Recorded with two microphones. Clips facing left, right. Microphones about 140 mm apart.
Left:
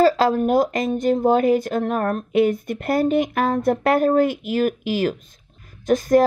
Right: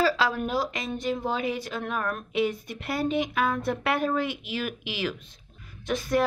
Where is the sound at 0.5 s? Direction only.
50° left (ahead or behind).